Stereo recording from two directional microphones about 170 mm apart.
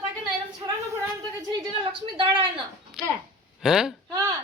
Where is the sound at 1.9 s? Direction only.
30° right (ahead or behind).